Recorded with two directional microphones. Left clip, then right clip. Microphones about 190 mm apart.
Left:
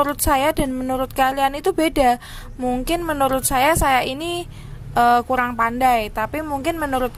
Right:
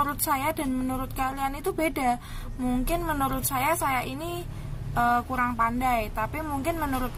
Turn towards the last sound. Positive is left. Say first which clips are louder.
# left 7 dB
turn(degrees=40)  # may be behind; listen again after turning